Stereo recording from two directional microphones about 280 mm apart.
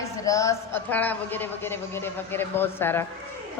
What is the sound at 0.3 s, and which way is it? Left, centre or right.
A man's voice, centre.